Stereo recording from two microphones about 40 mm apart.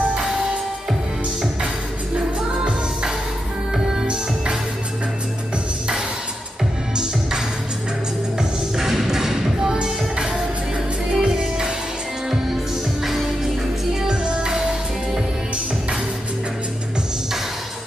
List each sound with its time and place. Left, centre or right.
2.1 s music: right
3.7 s music: centre
8.4 s music: centre
11.1 s music: centre
14.0 s music: right